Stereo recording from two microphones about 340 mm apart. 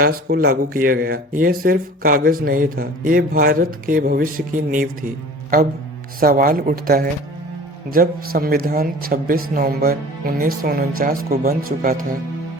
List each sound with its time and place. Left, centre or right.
0.0 s speech: right